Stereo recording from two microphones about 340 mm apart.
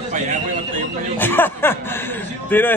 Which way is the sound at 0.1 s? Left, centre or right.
Right.